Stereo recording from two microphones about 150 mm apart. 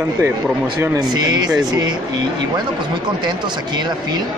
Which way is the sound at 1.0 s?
30° right (ahead or behind).